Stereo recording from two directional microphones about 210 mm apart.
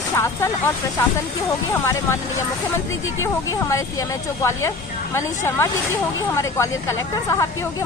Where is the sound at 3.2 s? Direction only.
15° left (ahead or behind).